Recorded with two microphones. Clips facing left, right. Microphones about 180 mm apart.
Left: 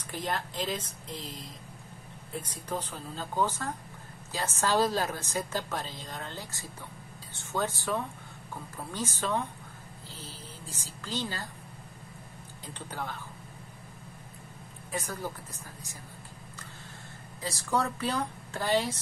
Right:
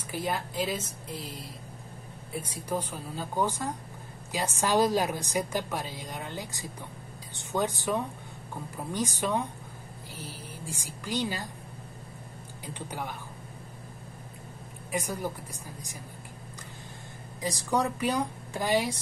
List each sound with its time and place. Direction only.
0.1 s a woman's voice: 10° right (ahead or behind)
12.6 s a woman's voice: 10° right (ahead or behind)
14.9 s a woman's voice: 15° right (ahead or behind)
17.4 s a woman's voice: 15° right (ahead or behind)